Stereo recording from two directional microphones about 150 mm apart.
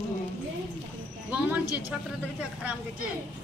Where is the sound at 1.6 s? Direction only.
25° left (ahead or behind).